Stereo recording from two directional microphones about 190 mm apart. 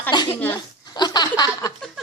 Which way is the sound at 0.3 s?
10° left (ahead or behind).